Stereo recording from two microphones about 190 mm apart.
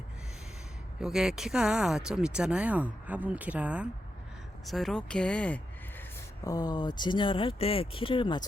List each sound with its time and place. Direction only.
0.9 s speech: centre (ahead or behind)
6.4 s speech: 20° left (ahead or behind)